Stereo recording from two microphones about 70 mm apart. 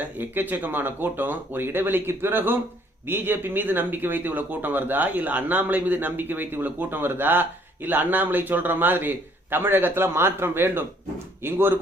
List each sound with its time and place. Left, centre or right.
0.0 s speech: right